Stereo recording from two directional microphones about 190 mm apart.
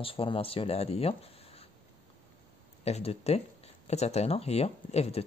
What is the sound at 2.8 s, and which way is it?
Speech, 35° left (ahead or behind).